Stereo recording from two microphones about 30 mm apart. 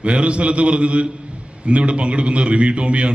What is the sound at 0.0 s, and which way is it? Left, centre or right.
A man's voice, right.